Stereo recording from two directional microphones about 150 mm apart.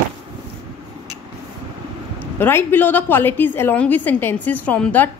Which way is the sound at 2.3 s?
15° left (ahead or behind).